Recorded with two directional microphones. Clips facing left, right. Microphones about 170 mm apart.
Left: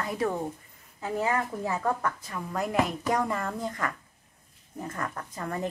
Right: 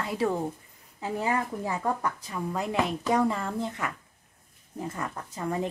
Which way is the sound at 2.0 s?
15° right (ahead or behind).